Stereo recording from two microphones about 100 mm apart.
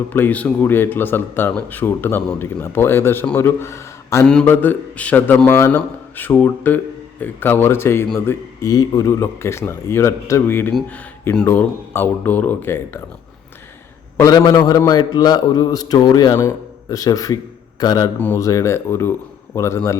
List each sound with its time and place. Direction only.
0.1 s speech: 15° left (ahead or behind)
4.4 s a man's voice: 20° left (ahead or behind)
8.6 s speech: 40° left (ahead or behind); by 13.0 s 20° left (ahead or behind)
14.3 s speech: 40° left (ahead or behind)